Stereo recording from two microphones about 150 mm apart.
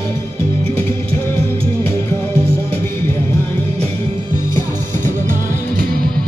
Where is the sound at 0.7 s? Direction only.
15° left (ahead or behind).